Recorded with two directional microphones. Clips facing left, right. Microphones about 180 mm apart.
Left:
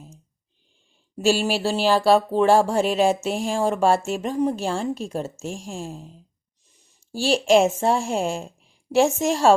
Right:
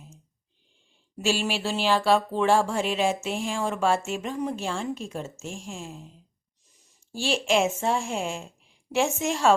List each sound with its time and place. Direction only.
1.1 s speech: 40° left (ahead or behind)